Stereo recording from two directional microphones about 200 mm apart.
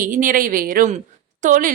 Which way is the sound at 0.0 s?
40° right (ahead or behind).